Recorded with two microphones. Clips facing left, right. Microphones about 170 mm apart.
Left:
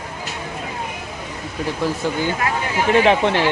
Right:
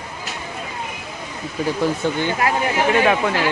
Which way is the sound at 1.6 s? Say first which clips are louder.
Right 2 dB; centre (ahead or behind).